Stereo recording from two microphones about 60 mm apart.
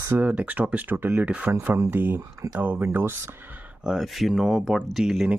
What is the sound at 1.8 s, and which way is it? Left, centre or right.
Speech, right.